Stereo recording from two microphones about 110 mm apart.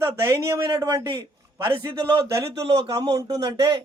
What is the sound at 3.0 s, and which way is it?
Speech, 35° right (ahead or behind).